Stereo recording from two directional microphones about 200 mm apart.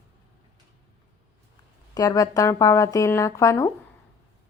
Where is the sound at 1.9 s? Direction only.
20° left (ahead or behind).